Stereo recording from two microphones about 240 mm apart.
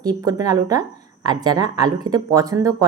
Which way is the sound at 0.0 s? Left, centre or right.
Centre.